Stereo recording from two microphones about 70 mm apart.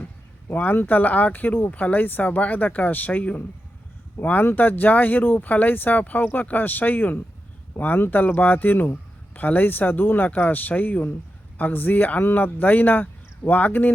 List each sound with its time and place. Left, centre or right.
0.4 s a man's voice: left